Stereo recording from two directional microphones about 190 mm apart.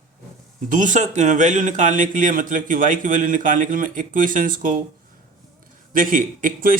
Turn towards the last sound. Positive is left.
turn(degrees=-45)  # may be behind; listen again after turning